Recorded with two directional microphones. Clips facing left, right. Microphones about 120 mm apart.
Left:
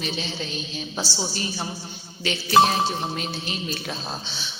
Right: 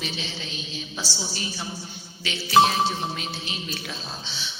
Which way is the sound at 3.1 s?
45° left (ahead or behind).